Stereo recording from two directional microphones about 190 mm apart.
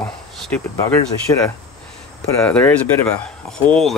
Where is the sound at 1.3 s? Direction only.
20° left (ahead or behind).